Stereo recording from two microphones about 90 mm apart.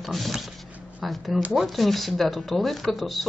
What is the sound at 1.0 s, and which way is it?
Speech, centre (ahead or behind).